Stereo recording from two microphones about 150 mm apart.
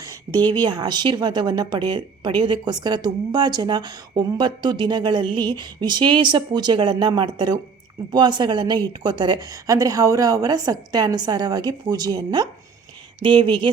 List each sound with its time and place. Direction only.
0.3 s a woman's voice: 20° right (ahead or behind)